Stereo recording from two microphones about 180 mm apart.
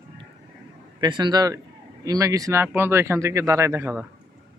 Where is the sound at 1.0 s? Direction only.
25° right (ahead or behind).